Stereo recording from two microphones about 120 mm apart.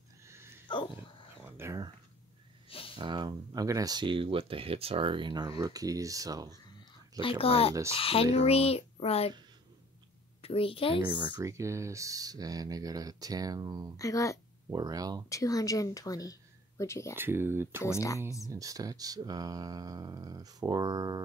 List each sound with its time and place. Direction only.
0.7 s dog: 40° left (ahead or behind)
1.4 s a sound: 20° right (ahead or behind)
2.7 s a sound: 50° left (ahead or behind)
3.0 s speech: 40° right (ahead or behind)
7.2 s a woman's voice: 50° left (ahead or behind)
10.4 s a woman's voice: 50° left (ahead or behind)
11.1 s speech: 40° right (ahead or behind)
11.4 s speech: 25° right (ahead or behind)
13.9 s speech: 30° left (ahead or behind)
14.7 s speech: 30° right (ahead or behind)
15.2 s speech: 25° left (ahead or behind)
17.1 s speech: 20° right (ahead or behind)
17.8 s speech: 25° left (ahead or behind)
18.4 s speech: 30° right (ahead or behind)